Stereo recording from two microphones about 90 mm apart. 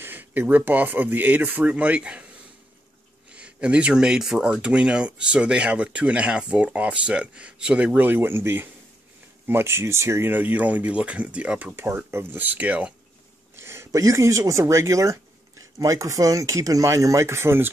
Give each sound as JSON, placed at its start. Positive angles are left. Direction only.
{"t": 0.0, "sound": "speech", "side_deg": -20}
{"t": 3.3, "sound": "speech", "side_deg": -10}
{"t": 10.3, "sound": "speech", "side_deg": -20}
{"t": 13.6, "sound": "speech", "side_deg": -30}